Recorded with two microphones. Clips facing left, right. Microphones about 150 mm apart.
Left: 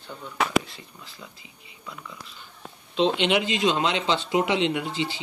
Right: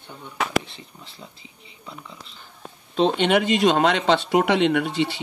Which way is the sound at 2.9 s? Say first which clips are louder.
Right 3 dB; 45° right (ahead or behind).